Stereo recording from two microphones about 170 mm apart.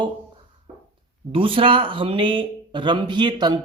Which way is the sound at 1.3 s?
30° right (ahead or behind).